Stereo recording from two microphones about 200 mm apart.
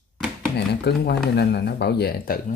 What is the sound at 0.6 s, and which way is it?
Speech, 55° left (ahead or behind).